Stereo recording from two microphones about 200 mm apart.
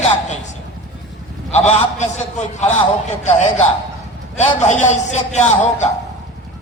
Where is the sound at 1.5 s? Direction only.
35° left (ahead or behind).